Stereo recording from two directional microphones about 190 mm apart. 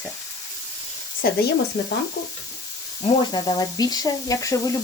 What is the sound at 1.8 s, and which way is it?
Stir, 60° left (ahead or behind).